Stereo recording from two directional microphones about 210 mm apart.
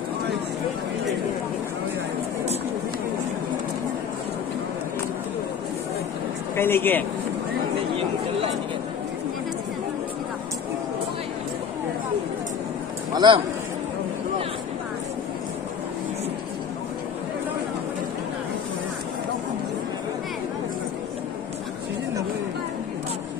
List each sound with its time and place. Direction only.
6.5 s speech: 10° left (ahead or behind)
13.1 s speech: 20° right (ahead or behind)